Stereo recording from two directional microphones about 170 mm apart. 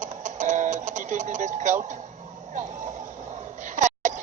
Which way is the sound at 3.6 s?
50° right (ahead or behind).